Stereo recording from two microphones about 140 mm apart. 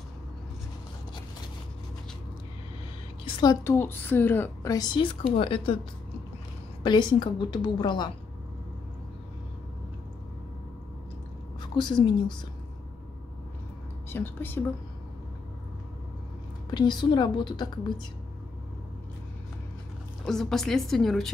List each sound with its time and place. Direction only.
3.6 s speech: 15° left (ahead or behind)
4.6 s a woman's voice: 30° left (ahead or behind)
6.8 s a woman's voice: 30° left (ahead or behind)
11.6 s a woman's voice: 35° left (ahead or behind)
14.0 s speech: 15° left (ahead or behind)
16.7 s a woman's voice: 30° left (ahead or behind)
20.2 s a woman's voice: 5° left (ahead or behind)